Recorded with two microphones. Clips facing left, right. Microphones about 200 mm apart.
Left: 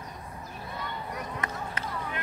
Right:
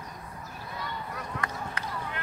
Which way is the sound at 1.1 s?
20° left (ahead or behind).